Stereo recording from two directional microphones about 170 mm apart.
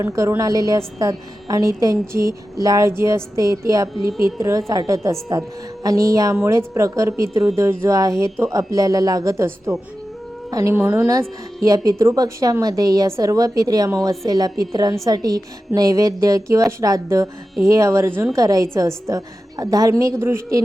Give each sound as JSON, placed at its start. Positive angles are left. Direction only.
{"t": 0.0, "sound": "a woman's voice", "side_deg": -15}